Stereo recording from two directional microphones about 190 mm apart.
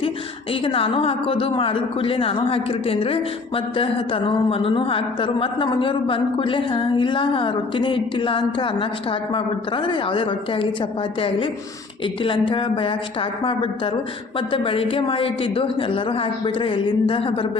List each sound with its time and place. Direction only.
0.6 s a woman's voice: 30° left (ahead or behind)
12.2 s a woman's voice: 25° left (ahead or behind)